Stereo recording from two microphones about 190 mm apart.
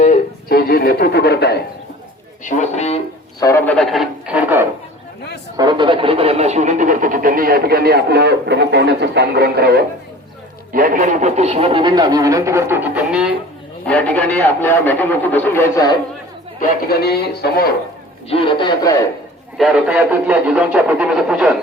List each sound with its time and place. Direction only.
0.0 s speech: 45° left (ahead or behind)
2.4 s speech: 40° left (ahead or behind)
3.4 s a man's voice: 15° left (ahead or behind)
3.8 s speech: centre (ahead or behind)
5.5 s a man's voice: 25° right (ahead or behind); by 13.3 s 5° right (ahead or behind)
13.8 s a man's voice: 10° left (ahead or behind)
16.6 s speech: 55° left (ahead or behind)
18.3 s a man's voice: 30° left (ahead or behind)
19.5 s speech: 5° right (ahead or behind)